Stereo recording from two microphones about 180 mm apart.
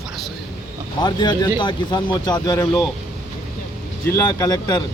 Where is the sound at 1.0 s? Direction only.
25° left (ahead or behind).